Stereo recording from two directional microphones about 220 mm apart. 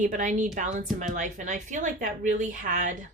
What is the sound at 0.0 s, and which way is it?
A woman's voice, 35° right (ahead or behind).